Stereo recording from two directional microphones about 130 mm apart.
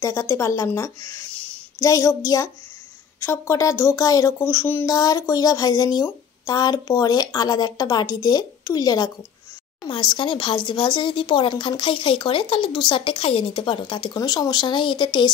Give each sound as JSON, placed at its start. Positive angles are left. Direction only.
{"t": 0.0, "sound": "speech", "side_deg": 25}
{"t": 1.3, "sound": "a sound", "side_deg": 10}
{"t": 1.8, "sound": "speech", "side_deg": 25}